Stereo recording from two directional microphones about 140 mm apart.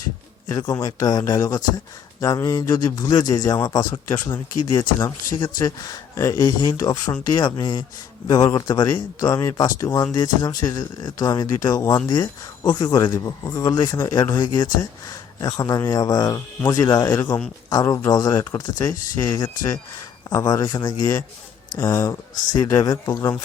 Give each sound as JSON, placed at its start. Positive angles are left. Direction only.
{"t": 0.5, "sound": "speech", "side_deg": 25}